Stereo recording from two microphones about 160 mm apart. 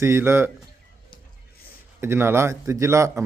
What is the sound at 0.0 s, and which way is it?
Speech, 15° right (ahead or behind).